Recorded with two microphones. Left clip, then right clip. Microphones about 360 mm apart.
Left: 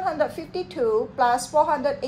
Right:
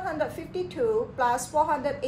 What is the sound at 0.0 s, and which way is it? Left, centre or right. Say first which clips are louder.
A woman's voice: left 5 dB; centre.